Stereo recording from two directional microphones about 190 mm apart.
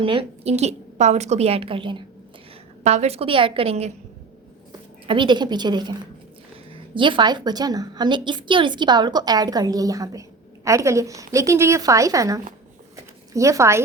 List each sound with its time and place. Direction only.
0.0 s a woman's voice: 30° right (ahead or behind)
5.0 s a woman's voice: 25° right (ahead or behind)
6.9 s a woman's voice: 25° right (ahead or behind)